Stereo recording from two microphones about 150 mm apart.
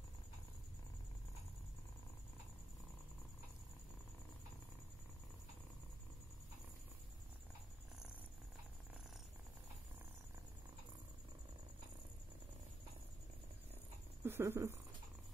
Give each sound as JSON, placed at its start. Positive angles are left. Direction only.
{"t": 14.2, "sound": "speech", "side_deg": -15}